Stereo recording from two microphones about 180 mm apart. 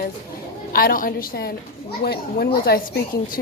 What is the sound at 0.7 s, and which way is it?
A woman's voice, 55° left (ahead or behind).